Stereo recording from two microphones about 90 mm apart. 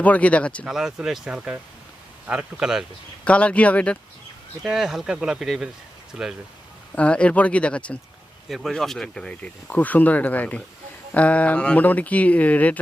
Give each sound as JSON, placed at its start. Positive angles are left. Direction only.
{"t": 0.0, "sound": "speech", "side_deg": 15}
{"t": 0.6, "sound": "speech", "side_deg": -5}
{"t": 3.2, "sound": "speech", "side_deg": 15}
{"t": 4.6, "sound": "speech", "side_deg": -5}
{"t": 6.9, "sound": "speech", "side_deg": 15}
{"t": 8.4, "sound": "speech", "side_deg": 0}